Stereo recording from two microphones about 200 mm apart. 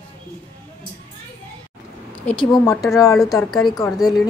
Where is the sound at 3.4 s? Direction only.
Centre (ahead or behind).